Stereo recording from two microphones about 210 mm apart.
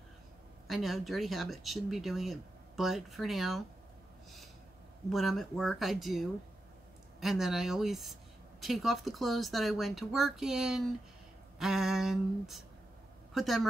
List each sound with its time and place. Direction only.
0.7 s a woman's voice: centre (ahead or behind)
5.1 s a woman's voice: centre (ahead or behind)